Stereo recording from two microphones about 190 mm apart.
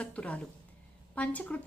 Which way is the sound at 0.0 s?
5° left (ahead or behind).